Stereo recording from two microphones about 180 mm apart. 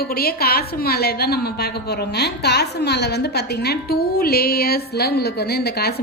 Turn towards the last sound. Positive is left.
turn(degrees=60)  # may be behind; listen again after turning